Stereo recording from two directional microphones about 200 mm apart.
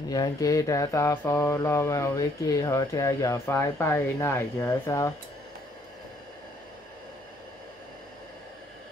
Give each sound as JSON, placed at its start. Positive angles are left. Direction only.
{"t": 0.1, "sound": "mantra", "side_deg": 20}